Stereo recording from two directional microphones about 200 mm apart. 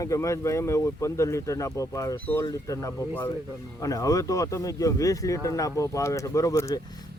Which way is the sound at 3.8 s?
15° left (ahead or behind).